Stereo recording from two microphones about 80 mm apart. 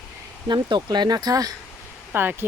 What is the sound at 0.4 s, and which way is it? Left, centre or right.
Speech, right.